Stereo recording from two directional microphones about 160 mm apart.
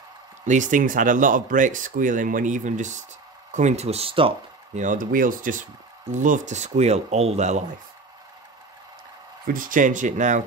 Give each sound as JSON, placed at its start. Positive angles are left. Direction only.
{"t": 0.5, "sound": "speech", "side_deg": -50}
{"t": 4.7, "sound": "speech", "side_deg": -55}
{"t": 9.5, "sound": "speech", "side_deg": -55}